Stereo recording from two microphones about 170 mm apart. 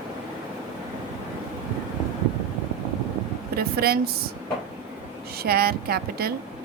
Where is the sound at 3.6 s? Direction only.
65° right (ahead or behind).